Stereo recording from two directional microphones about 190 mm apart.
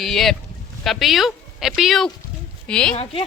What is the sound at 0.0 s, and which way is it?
A woman's voice, centre (ahead or behind).